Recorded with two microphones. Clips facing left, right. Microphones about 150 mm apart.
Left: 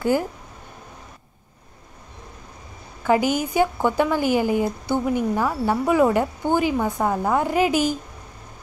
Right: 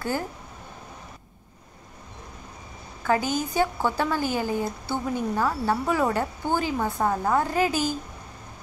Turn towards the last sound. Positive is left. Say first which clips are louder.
# left 4 dB
turn(degrees=15)  # may be behind; listen again after turning